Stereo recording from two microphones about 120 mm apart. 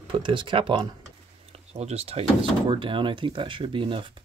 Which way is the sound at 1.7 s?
60° right (ahead or behind).